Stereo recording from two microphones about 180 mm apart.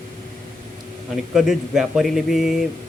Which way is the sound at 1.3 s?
5° right (ahead or behind).